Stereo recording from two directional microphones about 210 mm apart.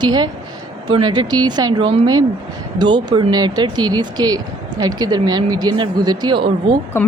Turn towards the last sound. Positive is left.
turn(degrees=10)  # may be behind; listen again after turning